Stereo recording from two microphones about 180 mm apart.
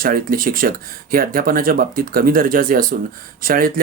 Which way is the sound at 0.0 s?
50° right (ahead or behind).